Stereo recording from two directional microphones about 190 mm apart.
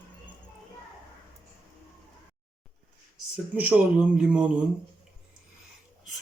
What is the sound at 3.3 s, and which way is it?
Speech, 10° right (ahead or behind).